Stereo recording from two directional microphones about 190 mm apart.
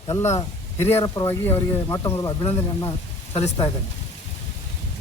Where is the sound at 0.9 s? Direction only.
15° left (ahead or behind).